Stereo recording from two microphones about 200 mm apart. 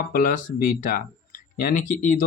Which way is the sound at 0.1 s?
45° left (ahead or behind).